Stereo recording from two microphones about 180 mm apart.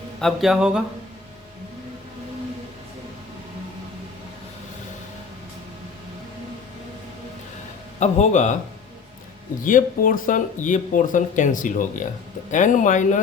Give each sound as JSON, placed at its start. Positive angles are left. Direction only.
{"t": 0.2, "sound": "speech", "side_deg": 0}
{"t": 7.9, "sound": "a man's voice", "side_deg": 40}
{"t": 9.6, "sound": "speech", "side_deg": 50}